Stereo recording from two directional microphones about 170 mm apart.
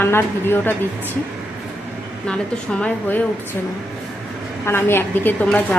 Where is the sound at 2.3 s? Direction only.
5° left (ahead or behind).